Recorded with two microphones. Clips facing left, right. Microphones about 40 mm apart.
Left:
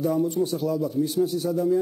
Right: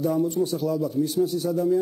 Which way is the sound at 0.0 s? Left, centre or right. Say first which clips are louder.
Even; centre.